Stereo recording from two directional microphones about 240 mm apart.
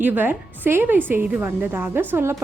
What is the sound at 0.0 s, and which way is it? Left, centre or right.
A woman's voice, centre.